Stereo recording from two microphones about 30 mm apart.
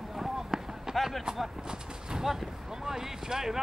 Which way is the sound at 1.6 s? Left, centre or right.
Right.